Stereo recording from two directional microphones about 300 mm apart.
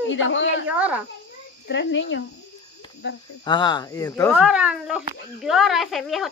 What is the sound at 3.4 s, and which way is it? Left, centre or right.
Speech, centre.